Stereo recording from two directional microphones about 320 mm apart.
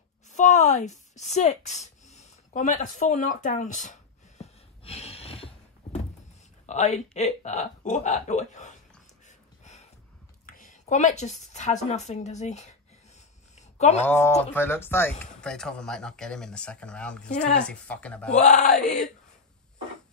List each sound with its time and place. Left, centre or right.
0.3 s a sound: left
6.6 s speech: left
10.4 s a woman's voice: left
13.6 s a sound: left
14.0 s speech: centre
17.4 s speech: left
17.6 s speech: centre
18.3 s speech: left